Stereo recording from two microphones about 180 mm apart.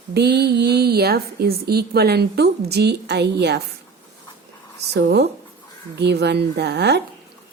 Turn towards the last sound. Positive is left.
turn(degrees=-70)  # may be behind; listen again after turning